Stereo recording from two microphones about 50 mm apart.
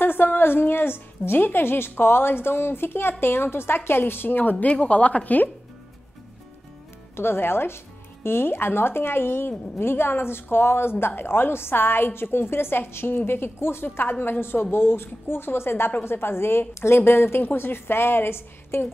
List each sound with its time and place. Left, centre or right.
0.0 s a woman's voice: left
7.2 s a woman's voice: left